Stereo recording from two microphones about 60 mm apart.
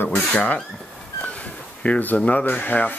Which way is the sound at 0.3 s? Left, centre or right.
Left.